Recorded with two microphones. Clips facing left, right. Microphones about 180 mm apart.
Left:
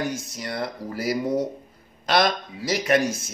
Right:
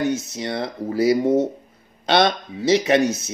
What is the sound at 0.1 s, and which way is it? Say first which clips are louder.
Speech: right 8 dB; centre (ahead or behind).